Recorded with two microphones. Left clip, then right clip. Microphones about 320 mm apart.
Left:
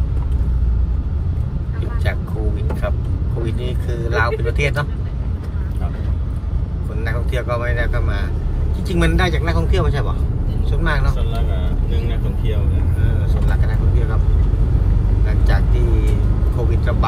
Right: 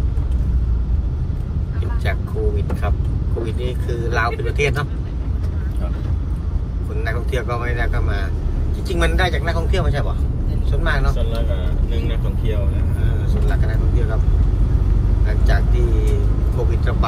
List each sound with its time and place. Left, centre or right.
3.6 s speech: centre
7.1 s speech: centre
15.4 s speech: centre